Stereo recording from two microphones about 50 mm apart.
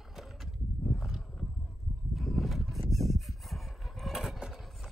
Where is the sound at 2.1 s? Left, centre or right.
Centre.